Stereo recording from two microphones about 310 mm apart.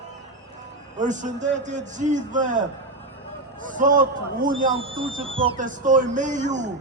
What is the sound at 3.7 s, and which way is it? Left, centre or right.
A man's voice, right.